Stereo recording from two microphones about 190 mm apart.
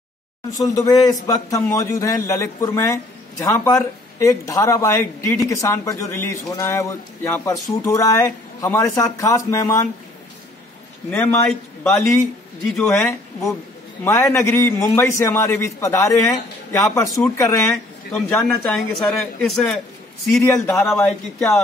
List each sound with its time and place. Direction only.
0.6 s a man's voice: 20° left (ahead or behind)
12.6 s speech: 5° left (ahead or behind)
14.0 s a man's voice: 15° left (ahead or behind)
17.6 s speech: centre (ahead or behind)